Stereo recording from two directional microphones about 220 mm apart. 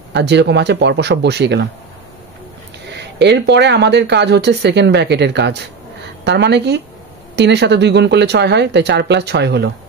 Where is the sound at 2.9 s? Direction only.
50° right (ahead or behind).